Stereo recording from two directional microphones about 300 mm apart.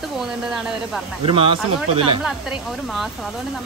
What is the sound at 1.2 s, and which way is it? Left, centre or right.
Speech, centre.